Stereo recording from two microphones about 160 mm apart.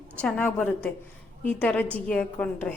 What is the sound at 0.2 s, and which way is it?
Speech, 10° left (ahead or behind).